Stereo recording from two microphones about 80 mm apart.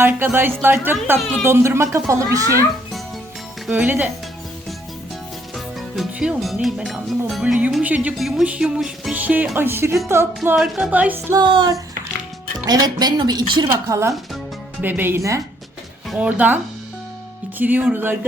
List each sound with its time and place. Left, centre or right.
0.0 s speech: right
1.2 s speech: centre
1.5 s speech: right
3.7 s speech: right
6.4 s speech: centre
7.4 s music: centre
9.1 s speech: centre
10.5 s speech: centre
10.9 s speech: right
11.3 s a sound: right
12.6 s speech: right
13.8 s speech: right
14.8 s speech: right
17.6 s speech: right